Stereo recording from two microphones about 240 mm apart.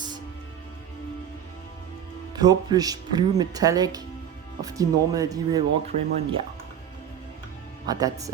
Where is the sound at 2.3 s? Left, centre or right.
Centre.